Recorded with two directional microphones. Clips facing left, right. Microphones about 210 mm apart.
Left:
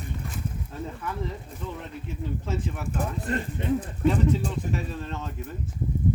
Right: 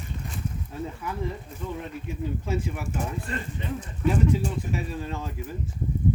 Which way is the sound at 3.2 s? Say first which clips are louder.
Left 5 dB; 55° left (ahead or behind).